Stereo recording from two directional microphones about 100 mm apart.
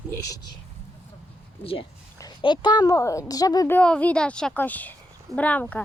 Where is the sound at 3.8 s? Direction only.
10° left (ahead or behind).